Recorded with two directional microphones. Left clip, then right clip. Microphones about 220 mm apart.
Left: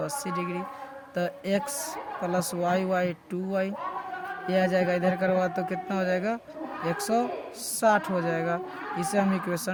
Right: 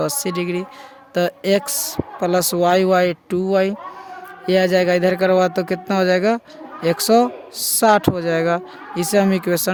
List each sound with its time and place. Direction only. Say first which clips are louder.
0.0 s speech: right 9 dB; 50° right (ahead or behind)